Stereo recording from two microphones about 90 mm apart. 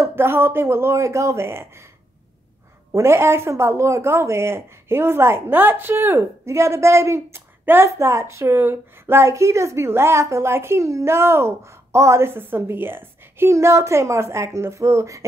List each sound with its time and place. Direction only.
0.0 s speech: 25° right (ahead or behind)
2.9 s speech: 30° right (ahead or behind)